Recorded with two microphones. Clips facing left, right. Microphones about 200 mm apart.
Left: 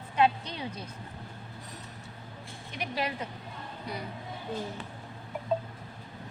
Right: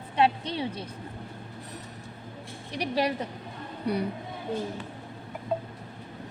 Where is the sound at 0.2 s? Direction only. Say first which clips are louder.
Right 2 dB; 30° right (ahead or behind).